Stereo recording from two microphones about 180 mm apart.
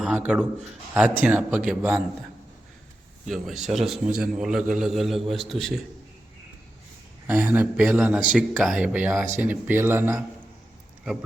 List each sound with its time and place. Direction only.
0.0 s a man's voice: 5° right (ahead or behind)
3.2 s a man's voice: centre (ahead or behind)
7.3 s a man's voice: 10° right (ahead or behind)